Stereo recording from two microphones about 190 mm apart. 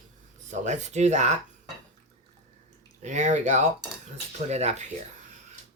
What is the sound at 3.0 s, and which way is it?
Speech, 40° right (ahead or behind).